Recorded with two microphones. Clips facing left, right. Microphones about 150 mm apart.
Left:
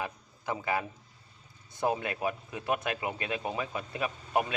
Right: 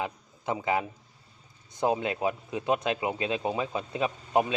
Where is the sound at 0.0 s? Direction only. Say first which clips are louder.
Right 4 dB; 20° right (ahead or behind).